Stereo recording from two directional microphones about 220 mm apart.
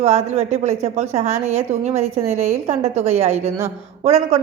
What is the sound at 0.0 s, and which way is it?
A woman's voice, 30° right (ahead or behind).